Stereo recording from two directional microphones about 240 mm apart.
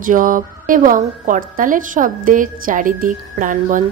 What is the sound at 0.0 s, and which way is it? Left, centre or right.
A woman's voice, right.